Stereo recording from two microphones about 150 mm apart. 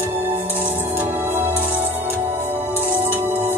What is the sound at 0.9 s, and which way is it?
Music, 15° right (ahead or behind).